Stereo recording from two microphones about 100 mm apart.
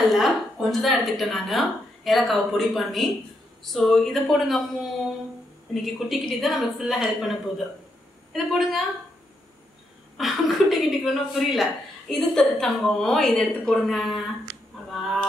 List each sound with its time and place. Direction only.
0.1 s a woman's voice: centre (ahead or behind)
5.8 s a woman's voice: centre (ahead or behind)
10.1 s a woman's voice: centre (ahead or behind)
14.9 s fowl: centre (ahead or behind)